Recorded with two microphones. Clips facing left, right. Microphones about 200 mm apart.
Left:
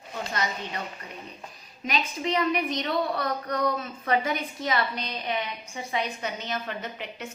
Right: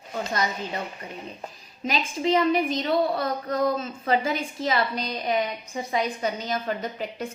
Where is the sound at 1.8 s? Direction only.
30° right (ahead or behind).